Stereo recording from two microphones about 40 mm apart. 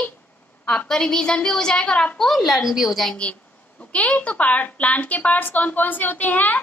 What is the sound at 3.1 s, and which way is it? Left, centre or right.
A woman's voice, left.